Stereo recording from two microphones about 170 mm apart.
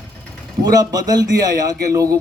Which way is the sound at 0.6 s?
20° right (ahead or behind).